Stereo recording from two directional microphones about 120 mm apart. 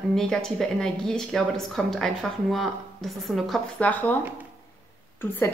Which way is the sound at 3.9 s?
15° left (ahead or behind).